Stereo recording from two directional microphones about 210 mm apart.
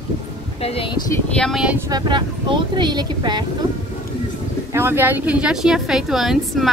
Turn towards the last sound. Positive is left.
turn(degrees=0)  # may be behind; listen again after turning